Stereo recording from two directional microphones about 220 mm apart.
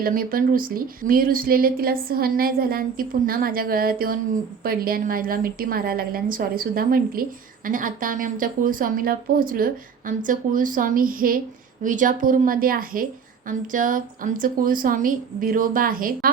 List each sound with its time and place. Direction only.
0.0 s speech: 40° right (ahead or behind)